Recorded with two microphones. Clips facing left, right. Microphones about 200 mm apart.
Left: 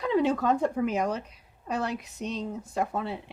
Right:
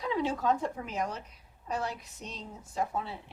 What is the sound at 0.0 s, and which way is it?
A woman's voice, 65° left (ahead or behind).